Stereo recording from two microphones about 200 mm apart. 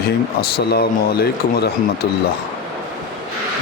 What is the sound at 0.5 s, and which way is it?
Speech, 50° left (ahead or behind).